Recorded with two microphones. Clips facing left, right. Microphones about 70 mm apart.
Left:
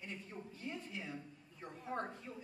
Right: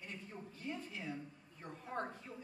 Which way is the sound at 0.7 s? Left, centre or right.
Centre.